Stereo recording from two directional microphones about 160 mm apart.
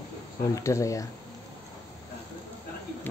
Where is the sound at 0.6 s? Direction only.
20° left (ahead or behind).